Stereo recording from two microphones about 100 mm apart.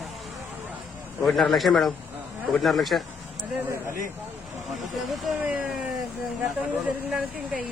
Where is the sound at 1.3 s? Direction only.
Centre (ahead or behind).